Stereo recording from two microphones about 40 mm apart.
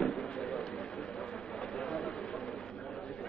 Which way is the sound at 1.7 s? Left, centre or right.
Left.